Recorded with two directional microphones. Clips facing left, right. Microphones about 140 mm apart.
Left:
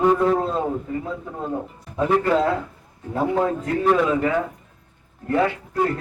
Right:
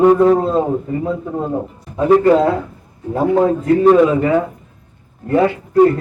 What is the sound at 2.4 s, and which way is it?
Speech, 20° right (ahead or behind).